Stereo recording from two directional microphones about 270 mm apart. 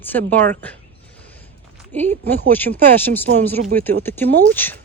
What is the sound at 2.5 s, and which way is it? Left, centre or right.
Speech, centre.